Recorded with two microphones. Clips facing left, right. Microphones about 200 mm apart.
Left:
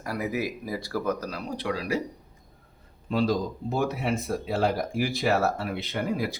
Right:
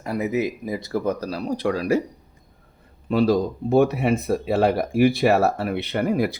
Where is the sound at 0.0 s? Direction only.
25° right (ahead or behind); by 2.0 s 45° right (ahead or behind).